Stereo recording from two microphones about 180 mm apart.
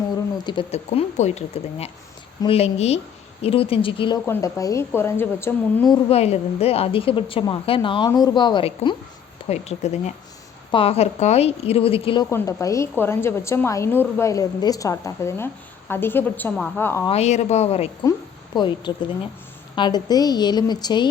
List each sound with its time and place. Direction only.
0.4 s a woman's voice: 25° left (ahead or behind)
0.9 s a woman's voice: 40° left (ahead or behind)
4.3 s a woman's voice: 15° left (ahead or behind)
5.9 s a woman's voice: 35° left (ahead or behind)
9.5 s a woman's voice: 35° left (ahead or behind)
12.3 s a woman's voice: 15° left (ahead or behind)
17.1 s a woman's voice: 35° left (ahead or behind)
18.5 s a woman's voice: 25° left (ahead or behind)